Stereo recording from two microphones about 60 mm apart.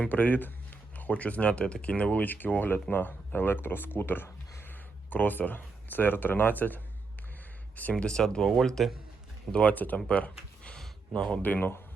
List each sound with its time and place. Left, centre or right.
0.1 s speech: left
8.0 s speech: centre
9.5 s speech: centre
9.7 s speech: left
11.4 s speech: left